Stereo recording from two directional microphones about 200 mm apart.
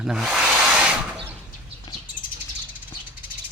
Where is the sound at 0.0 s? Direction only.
Centre (ahead or behind).